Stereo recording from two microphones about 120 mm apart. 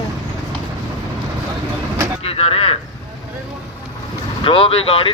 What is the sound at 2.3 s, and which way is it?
Speech, 55° left (ahead or behind).